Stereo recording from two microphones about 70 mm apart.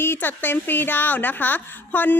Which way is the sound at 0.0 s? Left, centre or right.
Left.